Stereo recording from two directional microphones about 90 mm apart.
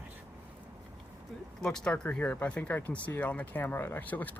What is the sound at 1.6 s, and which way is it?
Speech, 10° left (ahead or behind).